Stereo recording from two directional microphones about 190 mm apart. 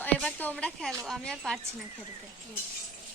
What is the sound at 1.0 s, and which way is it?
Speech, centre (ahead or behind).